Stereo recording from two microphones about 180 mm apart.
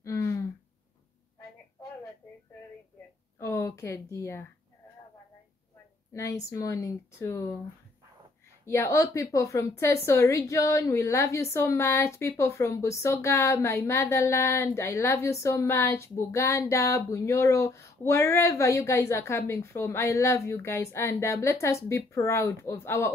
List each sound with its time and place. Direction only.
0.0 s a sound: 15° left (ahead or behind)
3.3 s speech: 15° left (ahead or behind)
6.5 s a woman's voice: 20° left (ahead or behind)
8.6 s a woman's voice: 15° left (ahead or behind)